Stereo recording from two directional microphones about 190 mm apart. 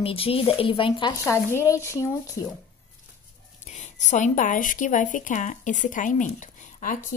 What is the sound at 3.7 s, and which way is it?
Speech, 40° left (ahead or behind).